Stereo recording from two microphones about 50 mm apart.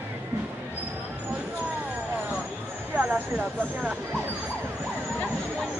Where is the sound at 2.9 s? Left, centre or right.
Right.